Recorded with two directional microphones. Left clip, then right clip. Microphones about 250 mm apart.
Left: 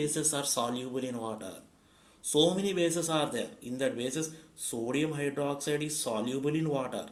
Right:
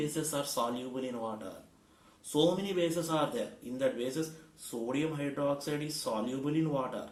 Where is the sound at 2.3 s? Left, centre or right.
Left.